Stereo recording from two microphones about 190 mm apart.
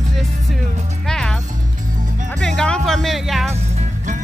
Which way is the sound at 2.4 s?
5° left (ahead or behind).